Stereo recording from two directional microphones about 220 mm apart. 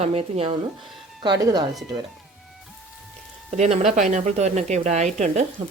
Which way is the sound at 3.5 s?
30° right (ahead or behind).